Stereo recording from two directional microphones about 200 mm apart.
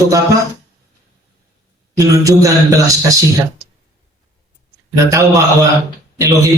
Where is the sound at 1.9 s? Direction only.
15° right (ahead or behind).